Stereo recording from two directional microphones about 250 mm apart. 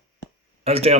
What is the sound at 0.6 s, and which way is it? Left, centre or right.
Speech, right.